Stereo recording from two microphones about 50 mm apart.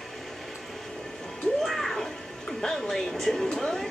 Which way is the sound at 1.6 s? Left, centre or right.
Centre.